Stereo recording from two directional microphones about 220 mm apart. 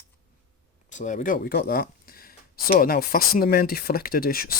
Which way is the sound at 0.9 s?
35° left (ahead or behind).